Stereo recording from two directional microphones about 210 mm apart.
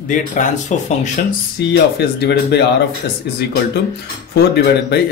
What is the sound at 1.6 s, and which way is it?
Speech, 50° left (ahead or behind).